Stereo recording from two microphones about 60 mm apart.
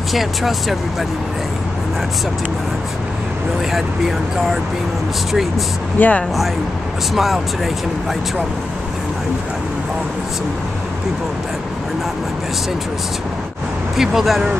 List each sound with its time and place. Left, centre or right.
0.1 s speech: centre
5.9 s speech: left
7.2 s speech: centre
13.9 s speech: centre